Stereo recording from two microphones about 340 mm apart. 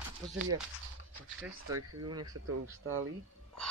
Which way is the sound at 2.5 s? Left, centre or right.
Right.